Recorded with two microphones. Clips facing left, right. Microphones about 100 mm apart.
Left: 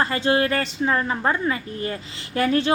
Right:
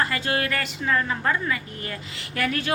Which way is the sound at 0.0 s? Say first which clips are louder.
Left 5 dB; 30° left (ahead or behind).